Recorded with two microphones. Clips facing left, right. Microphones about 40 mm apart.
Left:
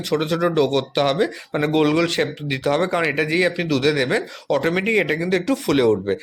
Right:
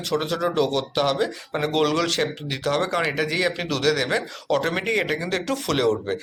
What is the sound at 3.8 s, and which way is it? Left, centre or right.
Speech, centre.